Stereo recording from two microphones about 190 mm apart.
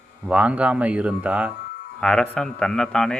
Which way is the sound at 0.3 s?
5° right (ahead or behind).